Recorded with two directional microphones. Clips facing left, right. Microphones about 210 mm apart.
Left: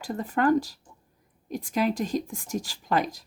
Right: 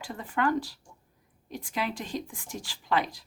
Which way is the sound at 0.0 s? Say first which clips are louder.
Left 5 dB; 40° left (ahead or behind).